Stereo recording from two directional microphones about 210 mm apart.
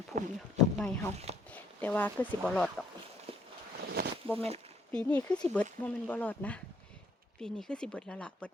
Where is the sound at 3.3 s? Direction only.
25° right (ahead or behind).